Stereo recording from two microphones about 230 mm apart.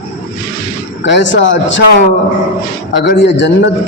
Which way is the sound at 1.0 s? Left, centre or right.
Left.